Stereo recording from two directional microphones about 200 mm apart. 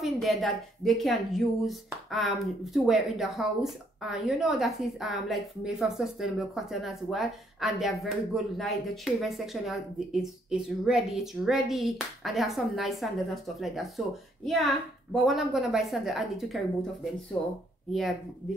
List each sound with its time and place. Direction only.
0.0 s a woman's voice: centre (ahead or behind)